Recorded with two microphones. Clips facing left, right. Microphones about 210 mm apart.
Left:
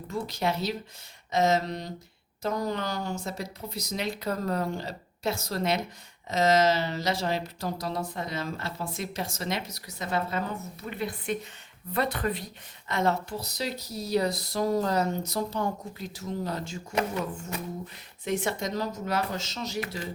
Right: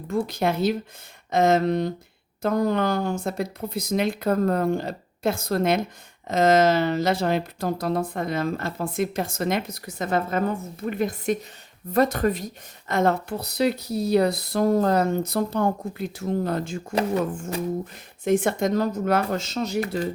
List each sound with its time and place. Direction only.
0.1 s speech: 55° right (ahead or behind)
16.9 s speech: 35° right (ahead or behind)
18.3 s speech: 50° right (ahead or behind)